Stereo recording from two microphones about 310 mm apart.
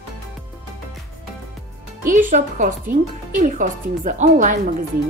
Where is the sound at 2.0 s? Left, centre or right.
Right.